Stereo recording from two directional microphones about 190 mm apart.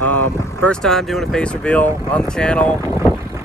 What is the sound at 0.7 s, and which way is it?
Speech, centre (ahead or behind).